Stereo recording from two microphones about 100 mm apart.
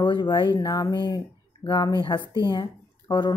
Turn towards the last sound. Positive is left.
turn(degrees=45)  # may be behind; listen again after turning